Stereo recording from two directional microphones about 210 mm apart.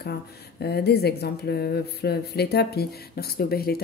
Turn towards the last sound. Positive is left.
turn(degrees=45)  # may be behind; listen again after turning